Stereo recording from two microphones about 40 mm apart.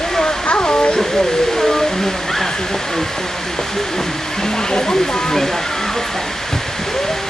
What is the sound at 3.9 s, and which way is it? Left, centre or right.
Speech, centre.